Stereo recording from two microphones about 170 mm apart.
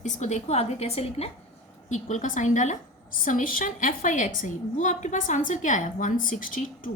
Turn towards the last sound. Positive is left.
turn(degrees=50)  # may be behind; listen again after turning